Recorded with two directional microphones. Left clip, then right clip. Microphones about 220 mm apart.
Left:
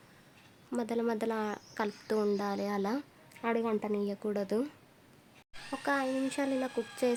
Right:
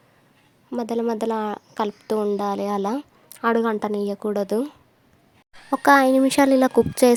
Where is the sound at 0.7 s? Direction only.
25° right (ahead or behind).